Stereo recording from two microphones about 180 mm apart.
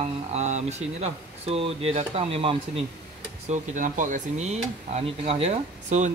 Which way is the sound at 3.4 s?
45° right (ahead or behind).